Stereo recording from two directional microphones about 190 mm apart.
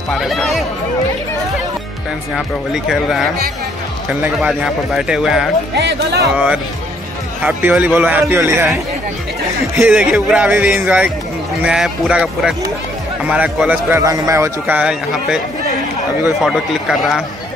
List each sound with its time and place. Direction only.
0.1 s speech: centre (ahead or behind)
2.3 s speech: centre (ahead or behind)
5.8 s speech: 65° right (ahead or behind)
6.3 s a man's voice: 5° right (ahead or behind)
16.4 s speech: centre (ahead or behind)